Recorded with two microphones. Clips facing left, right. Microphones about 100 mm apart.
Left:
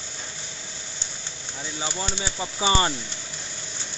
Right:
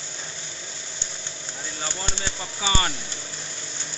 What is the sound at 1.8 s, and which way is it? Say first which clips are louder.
Speech: left 2 dB; 10° left (ahead or behind).